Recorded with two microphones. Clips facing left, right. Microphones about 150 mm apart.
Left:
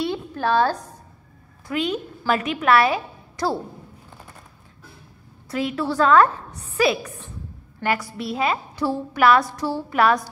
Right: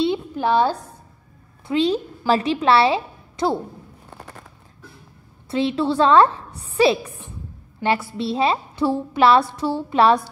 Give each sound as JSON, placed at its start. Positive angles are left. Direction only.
{"t": 0.0, "sound": "a sound", "side_deg": -15}
{"t": 1.7, "sound": "a woman's voice", "side_deg": -30}
{"t": 5.5, "sound": "a woman's voice", "side_deg": -30}
{"t": 7.8, "sound": "a woman's voice", "side_deg": -25}